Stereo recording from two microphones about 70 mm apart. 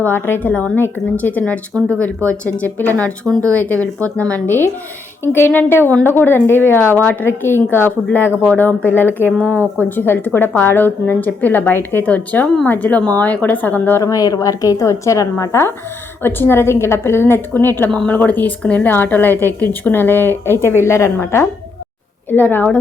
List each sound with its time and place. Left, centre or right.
0.0 s a woman's voice: left
8.3 s speech: right
8.9 s a woman's voice: left
14.0 s a woman's voice: left
16.2 s a woman's voice: left
22.3 s a woman's voice: left